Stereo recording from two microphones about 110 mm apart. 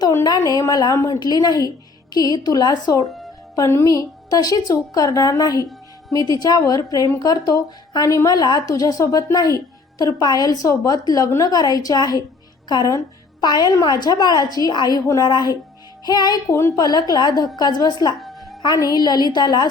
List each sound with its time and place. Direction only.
0.3 s a woman's voice: 35° left (ahead or behind)
3.5 s a woman's voice: 25° left (ahead or behind)
16.6 s a woman's voice: 25° left (ahead or behind)
16.8 s a woman's voice: 40° left (ahead or behind)
18.2 s music: centre (ahead or behind)
18.6 s a woman's voice: 35° left (ahead or behind)